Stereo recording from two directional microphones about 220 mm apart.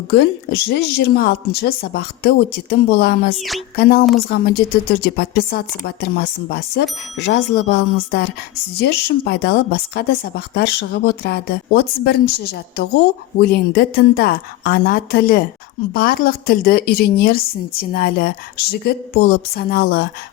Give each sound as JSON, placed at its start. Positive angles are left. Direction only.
{"t": 0.1, "sound": "speech", "side_deg": 50}
{"t": 3.3, "sound": "speech", "side_deg": 0}
{"t": 3.8, "sound": "speech", "side_deg": 45}